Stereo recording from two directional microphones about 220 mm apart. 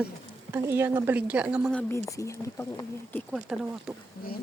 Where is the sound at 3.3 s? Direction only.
5° right (ahead or behind).